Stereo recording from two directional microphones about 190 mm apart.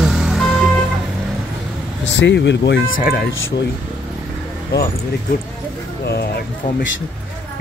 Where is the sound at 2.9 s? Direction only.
50° left (ahead or behind).